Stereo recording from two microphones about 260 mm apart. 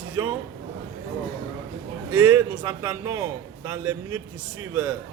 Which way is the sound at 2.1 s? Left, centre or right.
Centre.